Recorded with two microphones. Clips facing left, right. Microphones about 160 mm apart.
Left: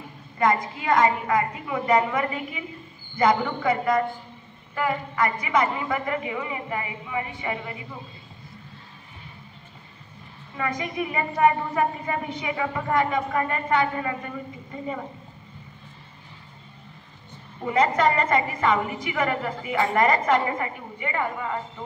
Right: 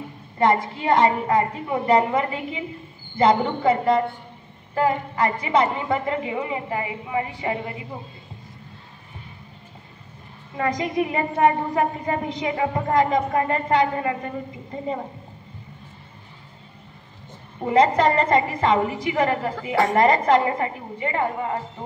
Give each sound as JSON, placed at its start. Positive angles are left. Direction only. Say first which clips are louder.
{"t": 0.4, "sound": "a woman's voice", "louder": "right 3 dB", "side_deg": -30}
{"t": 10.6, "sound": "a woman's voice", "louder": "right 5 dB", "side_deg": -40}
{"t": 17.6, "sound": "a woman's voice", "louder": "right 4 dB", "side_deg": -35}